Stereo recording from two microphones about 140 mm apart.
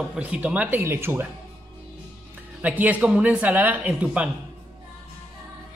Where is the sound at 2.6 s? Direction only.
10° right (ahead or behind).